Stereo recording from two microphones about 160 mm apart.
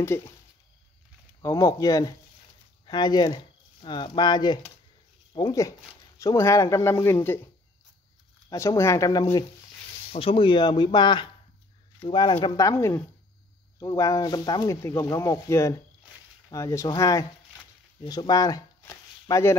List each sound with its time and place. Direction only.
1.4 s speech: 20° left (ahead or behind)
8.5 s speech: 20° left (ahead or behind)
10.1 s speech: 35° left (ahead or behind); by 19.5 s 20° left (ahead or behind)